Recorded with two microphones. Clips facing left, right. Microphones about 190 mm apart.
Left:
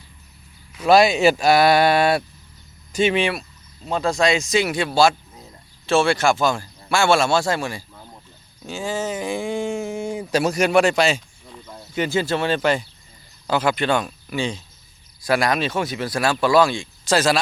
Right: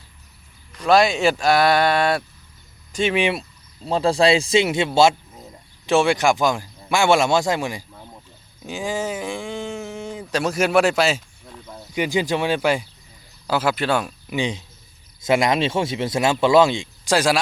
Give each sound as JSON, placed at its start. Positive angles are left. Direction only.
{"t": 0.7, "sound": "speech", "side_deg": 5}
{"t": 3.2, "sound": "speech", "side_deg": -20}
{"t": 3.8, "sound": "speech", "side_deg": -30}
{"t": 9.2, "sound": "a sound", "side_deg": 5}
{"t": 10.5, "sound": "speech", "side_deg": -5}
{"t": 11.9, "sound": "speech", "side_deg": -15}
{"t": 14.3, "sound": "speech", "side_deg": -20}